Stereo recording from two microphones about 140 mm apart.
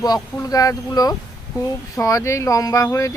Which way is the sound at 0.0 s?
25° left (ahead or behind).